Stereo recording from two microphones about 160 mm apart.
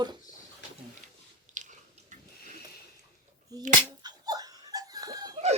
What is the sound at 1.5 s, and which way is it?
Biting, 50° right (ahead or behind).